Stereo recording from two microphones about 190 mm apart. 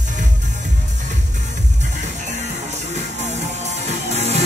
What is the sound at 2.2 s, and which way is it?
Music, 35° right (ahead or behind).